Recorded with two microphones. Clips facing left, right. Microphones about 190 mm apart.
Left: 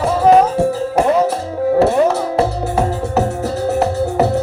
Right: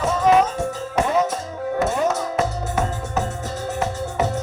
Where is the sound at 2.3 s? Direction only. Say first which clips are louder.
Left 6 dB; 35° left (ahead or behind).